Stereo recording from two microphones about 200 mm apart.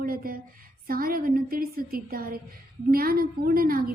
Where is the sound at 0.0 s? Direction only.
45° right (ahead or behind).